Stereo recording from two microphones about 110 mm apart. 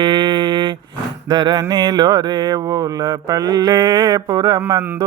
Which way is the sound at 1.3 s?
35° right (ahead or behind).